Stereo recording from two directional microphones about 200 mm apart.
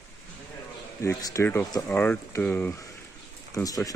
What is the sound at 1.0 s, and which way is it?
Speech, 15° left (ahead or behind).